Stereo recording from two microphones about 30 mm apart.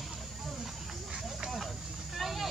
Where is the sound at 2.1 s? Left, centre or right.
Centre.